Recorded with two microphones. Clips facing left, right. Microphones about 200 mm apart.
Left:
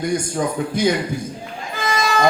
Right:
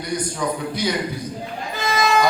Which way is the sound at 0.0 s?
50° left (ahead or behind).